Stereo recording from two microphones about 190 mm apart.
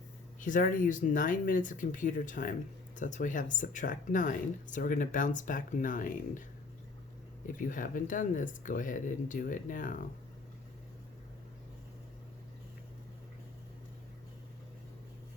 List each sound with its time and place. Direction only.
0.3 s speech: 45° left (ahead or behind)
7.4 s speech: 45° left (ahead or behind)